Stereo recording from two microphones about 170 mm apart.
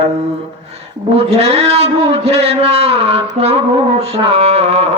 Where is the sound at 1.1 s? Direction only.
35° right (ahead or behind).